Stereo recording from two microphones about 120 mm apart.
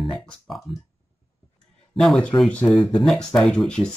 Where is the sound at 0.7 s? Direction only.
50° left (ahead or behind).